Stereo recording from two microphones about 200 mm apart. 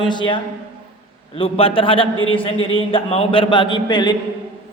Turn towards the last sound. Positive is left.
turn(degrees=20)  # may be behind; listen again after turning